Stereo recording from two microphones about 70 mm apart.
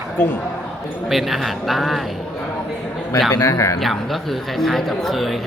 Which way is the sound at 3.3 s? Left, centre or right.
Left.